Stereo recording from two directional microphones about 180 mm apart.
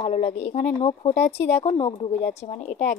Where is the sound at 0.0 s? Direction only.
40° left (ahead or behind).